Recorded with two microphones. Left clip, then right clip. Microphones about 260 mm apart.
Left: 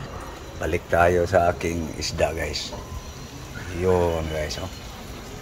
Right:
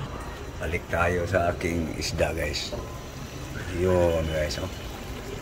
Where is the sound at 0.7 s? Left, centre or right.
Centre.